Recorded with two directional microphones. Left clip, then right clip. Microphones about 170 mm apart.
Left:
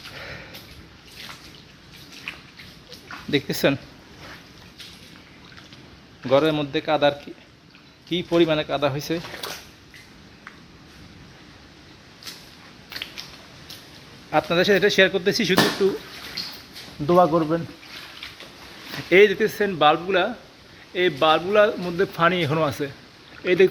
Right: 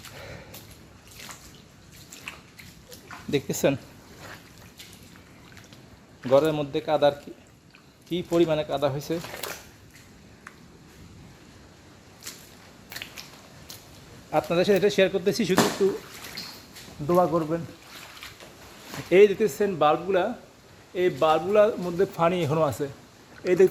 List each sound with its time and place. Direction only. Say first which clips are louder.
0.2 s a sound: left 6 dB; 10° right (ahead or behind)
2.3 s a sound: left 5 dB; 10° right (ahead or behind)
3.3 s speech: left 3 dB; 5° right (ahead or behind)
6.2 s speech: left 2 dB; centre (ahead or behind)
14.3 s speech: left 3 dB; centre (ahead or behind)
17.1 s speech: left 5 dB; 20° left (ahead or behind)
19.1 s a man's voice: left 2 dB; 10° right (ahead or behind)